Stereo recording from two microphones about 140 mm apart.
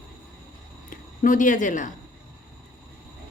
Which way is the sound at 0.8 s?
75° left (ahead or behind).